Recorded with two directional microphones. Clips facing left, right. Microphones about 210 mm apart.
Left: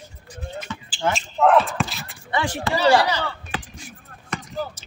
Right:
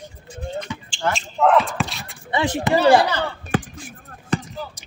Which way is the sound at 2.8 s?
55° right (ahead or behind).